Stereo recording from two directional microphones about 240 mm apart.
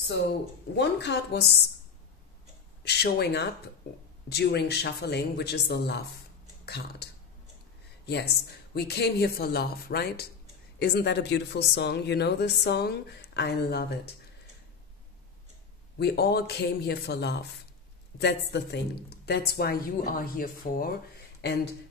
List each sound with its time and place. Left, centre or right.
0.7 s speech: left
2.8 s speech: left
8.1 s a woman's voice: left
16.0 s a woman's voice: left